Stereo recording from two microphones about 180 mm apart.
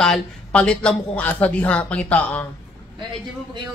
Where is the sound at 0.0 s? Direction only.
5° left (ahead or behind).